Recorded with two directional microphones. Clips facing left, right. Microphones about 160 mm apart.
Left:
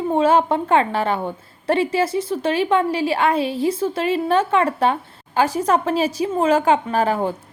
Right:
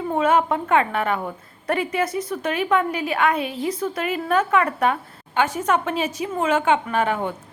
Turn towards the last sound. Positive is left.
turn(degrees=35)  # may be behind; listen again after turning